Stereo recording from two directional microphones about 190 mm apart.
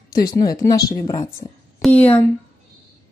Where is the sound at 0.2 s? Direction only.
20° left (ahead or behind).